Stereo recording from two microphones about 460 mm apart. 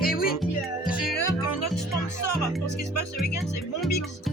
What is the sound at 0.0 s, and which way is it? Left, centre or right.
Music, centre.